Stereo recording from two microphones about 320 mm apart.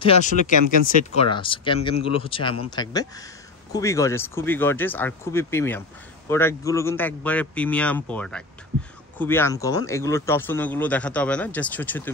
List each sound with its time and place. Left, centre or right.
0.0 s speech: left